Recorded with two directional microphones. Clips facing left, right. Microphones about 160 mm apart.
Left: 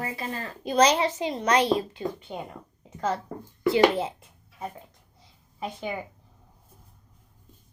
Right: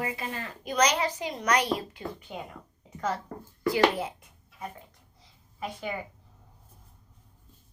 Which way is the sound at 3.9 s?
25° left (ahead or behind).